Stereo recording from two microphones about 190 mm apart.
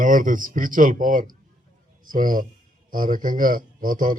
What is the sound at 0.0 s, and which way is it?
A man's voice, 45° right (ahead or behind).